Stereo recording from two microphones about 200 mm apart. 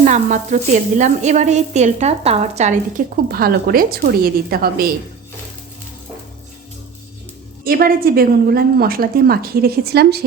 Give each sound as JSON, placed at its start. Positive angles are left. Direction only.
{"t": 0.0, "sound": "sizzle", "side_deg": -35}
{"t": 3.2, "sound": "a woman's voice", "side_deg": -50}
{"t": 7.6, "sound": "a woman's voice", "side_deg": -45}